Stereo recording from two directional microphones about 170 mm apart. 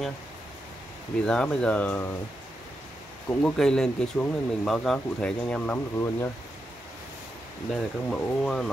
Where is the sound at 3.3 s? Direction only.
5° left (ahead or behind).